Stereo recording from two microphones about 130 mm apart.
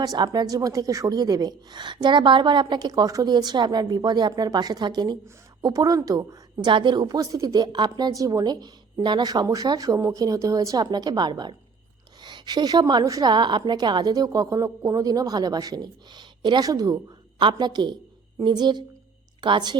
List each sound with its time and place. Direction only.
0.0 s a woman's voice: 30° right (ahead or behind)